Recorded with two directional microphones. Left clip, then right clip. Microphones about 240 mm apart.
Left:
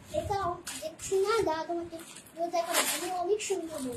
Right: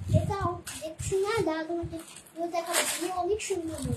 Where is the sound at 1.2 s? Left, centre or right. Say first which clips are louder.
Left 1 dB; centre.